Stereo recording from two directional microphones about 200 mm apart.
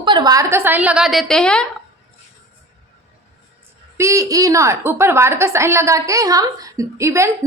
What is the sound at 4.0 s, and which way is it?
A woman's voice, 15° right (ahead or behind).